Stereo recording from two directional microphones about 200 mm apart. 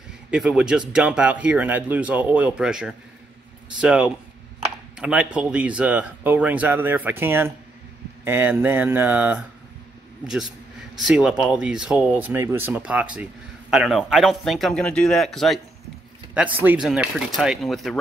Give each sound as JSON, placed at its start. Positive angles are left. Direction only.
{"t": 0.3, "sound": "speech", "side_deg": -5}